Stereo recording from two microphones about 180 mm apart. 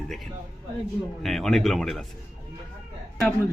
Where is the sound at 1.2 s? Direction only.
Centre (ahead or behind).